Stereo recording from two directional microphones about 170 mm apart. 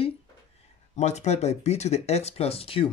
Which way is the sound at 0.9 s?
40° left (ahead or behind).